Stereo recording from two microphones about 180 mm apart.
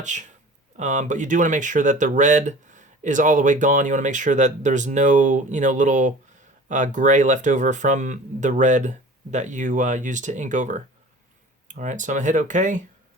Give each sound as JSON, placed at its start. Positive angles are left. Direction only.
{"t": 0.0, "sound": "speech", "side_deg": -40}